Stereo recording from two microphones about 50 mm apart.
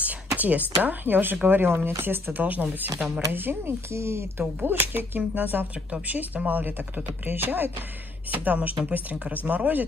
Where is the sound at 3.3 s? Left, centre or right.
Right.